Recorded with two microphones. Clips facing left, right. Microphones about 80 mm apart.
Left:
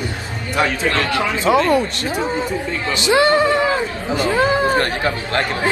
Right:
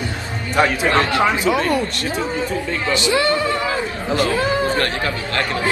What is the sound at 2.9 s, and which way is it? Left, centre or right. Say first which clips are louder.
Speech: left 4 dB; left.